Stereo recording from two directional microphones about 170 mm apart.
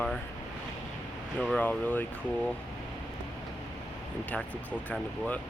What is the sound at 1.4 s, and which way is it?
Speech, 5° left (ahead or behind).